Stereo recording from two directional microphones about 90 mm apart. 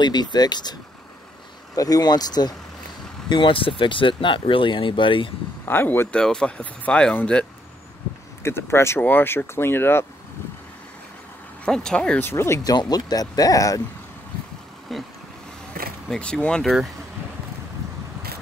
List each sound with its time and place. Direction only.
0.0 s speech: 55° left (ahead or behind)
1.8 s speech: 45° left (ahead or behind)
3.3 s speech: 65° left (ahead or behind)
5.7 s speech: 25° left (ahead or behind)
6.1 s speech: 10° left (ahead or behind)
8.4 s speech: 30° left (ahead or behind)
11.6 s speech: 10° left (ahead or behind)
12.2 s speech: 30° left (ahead or behind)
12.7 s speech: 45° left (ahead or behind)
14.9 s vehicle: centre (ahead or behind)
16.1 s speech: 10° left (ahead or behind)